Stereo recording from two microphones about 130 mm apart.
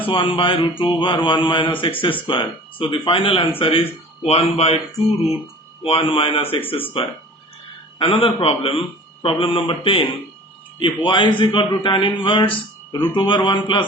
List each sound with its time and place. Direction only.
0.1 s a man's voice: 40° left (ahead or behind)
5.8 s a man's voice: 45° left (ahead or behind)